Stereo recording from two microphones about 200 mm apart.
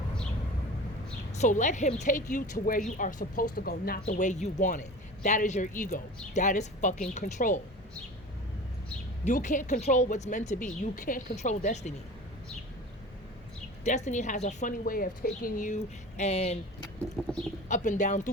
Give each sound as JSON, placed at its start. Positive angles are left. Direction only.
{"t": 1.3, "sound": "a woman's voice", "side_deg": 35}
{"t": 9.2, "sound": "a woman's voice", "side_deg": 40}
{"t": 13.8, "sound": "a woman's voice", "side_deg": 35}
{"t": 17.7, "sound": "a woman's voice", "side_deg": 40}